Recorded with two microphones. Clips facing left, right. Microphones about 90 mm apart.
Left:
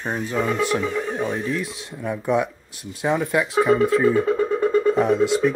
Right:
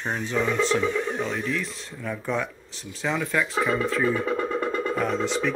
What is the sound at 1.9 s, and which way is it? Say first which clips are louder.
Speech: left 7 dB; 25° left (ahead or behind).